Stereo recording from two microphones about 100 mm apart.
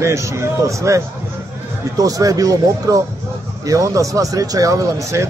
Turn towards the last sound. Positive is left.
turn(degrees=-30)  # may be behind; listen again after turning